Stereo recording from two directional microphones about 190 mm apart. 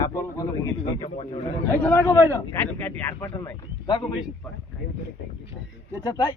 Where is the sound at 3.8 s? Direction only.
25° left (ahead or behind).